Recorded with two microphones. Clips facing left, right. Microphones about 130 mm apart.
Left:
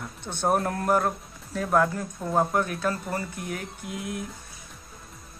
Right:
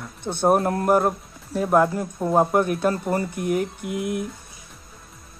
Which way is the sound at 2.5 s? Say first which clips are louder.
Right 6 dB; 15° right (ahead or behind).